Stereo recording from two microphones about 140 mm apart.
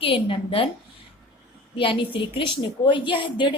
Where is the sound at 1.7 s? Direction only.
40° left (ahead or behind).